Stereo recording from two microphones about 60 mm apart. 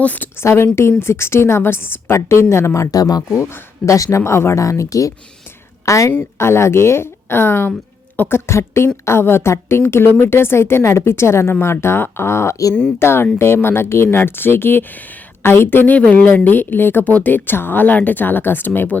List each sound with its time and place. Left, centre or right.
0.0 s a woman's voice: left
0.3 s a woman's voice: left
3.8 s speech: left
4.2 s a woman's voice: left
6.4 s a woman's voice: left
8.4 s a woman's voice: left
16.0 s a woman's voice: left